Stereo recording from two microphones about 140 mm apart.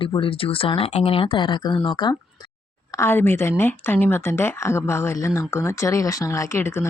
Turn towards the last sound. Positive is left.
turn(degrees=20)  # may be behind; listen again after turning